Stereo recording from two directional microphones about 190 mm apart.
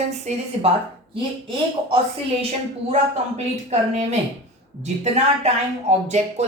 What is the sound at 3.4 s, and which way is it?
Speech, 35° right (ahead or behind).